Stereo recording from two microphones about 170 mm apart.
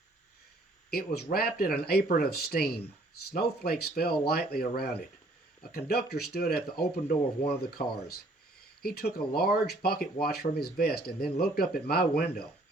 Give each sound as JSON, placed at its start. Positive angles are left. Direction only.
{"t": 0.9, "sound": "speech", "side_deg": 65}
{"t": 3.3, "sound": "speech", "side_deg": 65}
{"t": 7.8, "sound": "speech", "side_deg": 45}
{"t": 8.8, "sound": "speech", "side_deg": 65}